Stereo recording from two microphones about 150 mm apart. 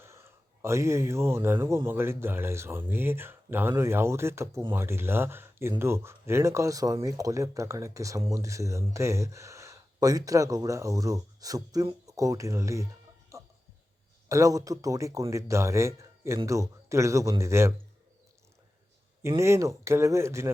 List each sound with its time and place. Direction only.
0.0 s speech: 15° right (ahead or behind)
13.3 s a sound: 20° right (ahead or behind)
14.3 s speech: 20° right (ahead or behind)
19.4 s speech: 20° right (ahead or behind)